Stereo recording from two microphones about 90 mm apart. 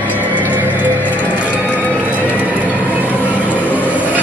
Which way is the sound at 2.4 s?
15° right (ahead or behind).